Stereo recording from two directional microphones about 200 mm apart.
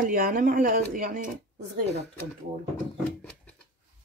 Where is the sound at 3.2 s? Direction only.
5° left (ahead or behind).